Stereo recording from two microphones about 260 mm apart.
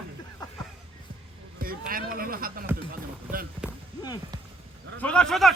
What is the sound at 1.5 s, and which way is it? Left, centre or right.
Speech, right.